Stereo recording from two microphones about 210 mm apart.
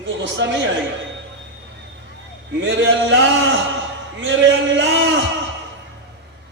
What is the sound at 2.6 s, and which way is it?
A man's voice, 60° right (ahead or behind).